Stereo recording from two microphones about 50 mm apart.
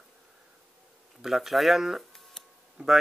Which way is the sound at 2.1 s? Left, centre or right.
Centre.